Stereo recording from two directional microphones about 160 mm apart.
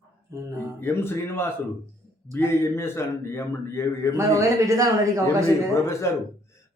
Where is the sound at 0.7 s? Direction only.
15° left (ahead or behind).